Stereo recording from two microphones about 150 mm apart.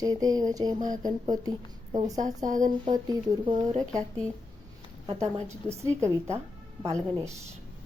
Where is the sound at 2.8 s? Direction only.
30° right (ahead or behind).